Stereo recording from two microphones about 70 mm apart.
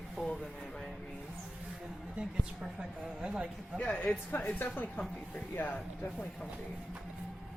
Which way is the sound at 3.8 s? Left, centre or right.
Centre.